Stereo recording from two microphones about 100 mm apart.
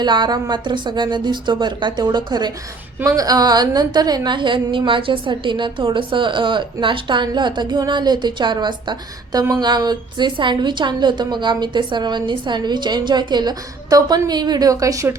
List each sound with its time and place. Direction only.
0.0 s a woman's voice: 45° right (ahead or behind)